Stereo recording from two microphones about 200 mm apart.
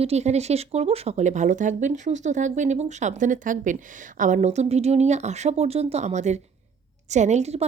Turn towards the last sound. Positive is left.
turn(degrees=-35)  # may be behind; listen again after turning